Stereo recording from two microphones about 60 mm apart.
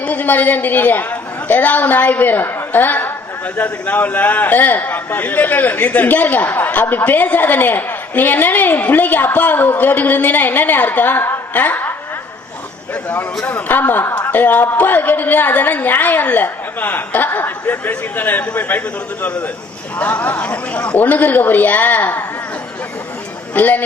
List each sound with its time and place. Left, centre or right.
0.0 s a man's voice: left
12.9 s a man's voice: left
20.0 s a man's voice: left
23.6 s a man's voice: left